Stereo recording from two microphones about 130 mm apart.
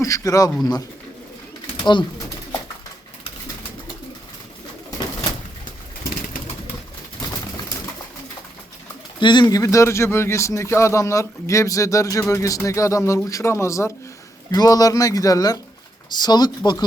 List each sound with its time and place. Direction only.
0.0 s a sound: 25° left (ahead or behind)
1.8 s speech: 35° left (ahead or behind)
9.2 s speech: 35° left (ahead or behind)